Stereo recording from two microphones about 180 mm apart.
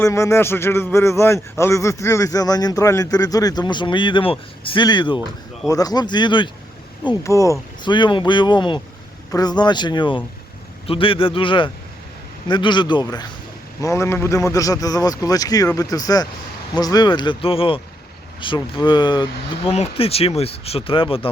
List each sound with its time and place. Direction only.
0.0 s a man's voice: 15° left (ahead or behind)